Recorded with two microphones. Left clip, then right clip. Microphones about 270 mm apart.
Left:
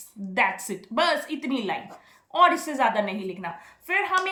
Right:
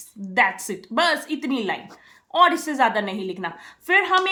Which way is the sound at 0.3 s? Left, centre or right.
Right.